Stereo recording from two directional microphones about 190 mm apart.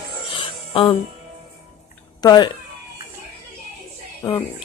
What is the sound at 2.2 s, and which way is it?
Speech, 20° left (ahead or behind).